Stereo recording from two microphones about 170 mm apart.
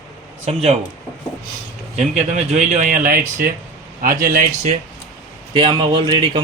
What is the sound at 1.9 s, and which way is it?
A man's voice, 40° right (ahead or behind).